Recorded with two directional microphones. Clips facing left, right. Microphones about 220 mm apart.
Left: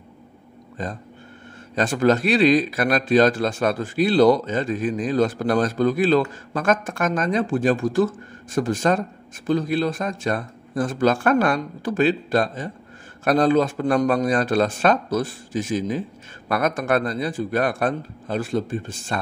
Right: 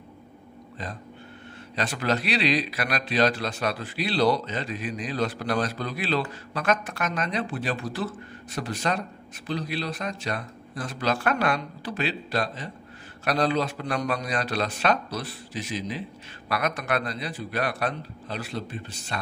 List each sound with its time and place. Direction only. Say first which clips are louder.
1.8 s speech: left 8 dB; 50° left (ahead or behind)